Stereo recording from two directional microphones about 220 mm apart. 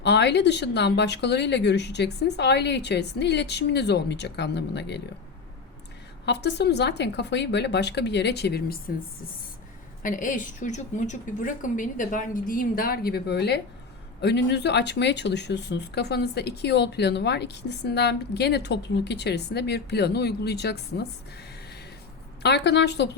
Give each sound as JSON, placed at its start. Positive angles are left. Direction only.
{"t": 0.0, "sound": "speech", "side_deg": 50}
{"t": 6.2, "sound": "speech", "side_deg": 50}
{"t": 10.0, "sound": "a woman's voice", "side_deg": 35}
{"t": 22.4, "sound": "speech", "side_deg": 50}